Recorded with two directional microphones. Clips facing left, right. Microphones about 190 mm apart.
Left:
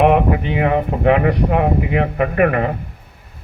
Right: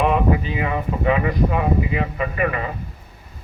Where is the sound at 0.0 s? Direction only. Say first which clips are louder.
Left 5 dB; 65° left (ahead or behind).